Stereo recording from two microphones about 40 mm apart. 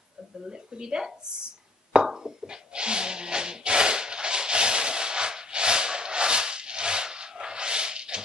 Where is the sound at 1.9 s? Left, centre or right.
Centre.